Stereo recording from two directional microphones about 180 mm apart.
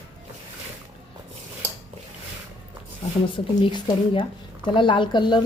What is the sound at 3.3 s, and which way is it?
A woman's voice, 30° left (ahead or behind).